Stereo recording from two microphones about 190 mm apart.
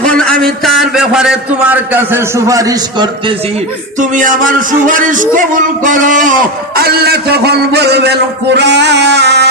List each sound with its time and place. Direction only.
0.0 s a man's voice: 5° left (ahead or behind); by 3.3 s 20° right (ahead or behind)
4.0 s speech: 45° right (ahead or behind)
6.7 s a man's voice: 55° right (ahead or behind)